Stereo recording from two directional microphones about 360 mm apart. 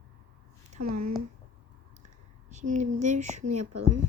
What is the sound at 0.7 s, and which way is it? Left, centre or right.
Speech, right.